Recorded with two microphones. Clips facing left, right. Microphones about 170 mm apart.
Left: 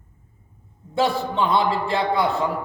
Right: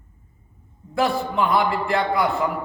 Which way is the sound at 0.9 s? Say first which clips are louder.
Even; 25° left (ahead or behind).